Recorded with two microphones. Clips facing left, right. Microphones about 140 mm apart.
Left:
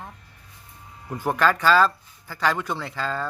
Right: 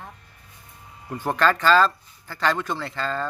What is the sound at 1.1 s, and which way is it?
Speech, 10° left (ahead or behind).